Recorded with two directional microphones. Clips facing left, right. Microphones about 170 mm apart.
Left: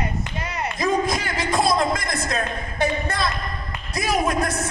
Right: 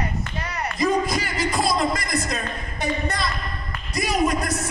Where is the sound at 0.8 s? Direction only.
Centre (ahead or behind).